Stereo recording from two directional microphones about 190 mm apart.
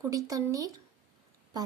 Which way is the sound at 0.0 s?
15° right (ahead or behind).